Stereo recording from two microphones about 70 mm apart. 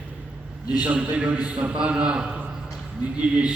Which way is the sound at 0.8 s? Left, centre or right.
Centre.